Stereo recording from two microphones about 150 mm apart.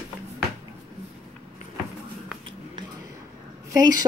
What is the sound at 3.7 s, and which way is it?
Speech, 25° right (ahead or behind).